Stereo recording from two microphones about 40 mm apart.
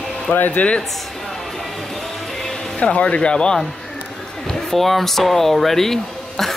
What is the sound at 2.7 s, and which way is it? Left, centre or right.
Speech, left.